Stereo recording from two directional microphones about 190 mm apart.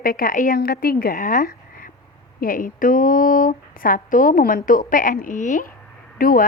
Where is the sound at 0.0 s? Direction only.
50° left (ahead or behind).